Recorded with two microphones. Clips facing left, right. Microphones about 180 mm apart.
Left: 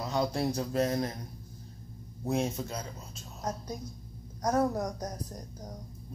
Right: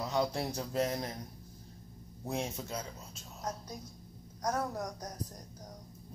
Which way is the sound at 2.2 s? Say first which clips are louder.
Left 6 dB; 20° left (ahead or behind).